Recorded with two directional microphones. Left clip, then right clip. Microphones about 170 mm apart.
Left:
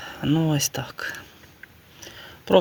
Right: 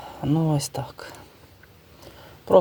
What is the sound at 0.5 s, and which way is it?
Speech, centre (ahead or behind).